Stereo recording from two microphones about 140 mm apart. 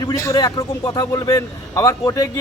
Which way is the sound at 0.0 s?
25° left (ahead or behind).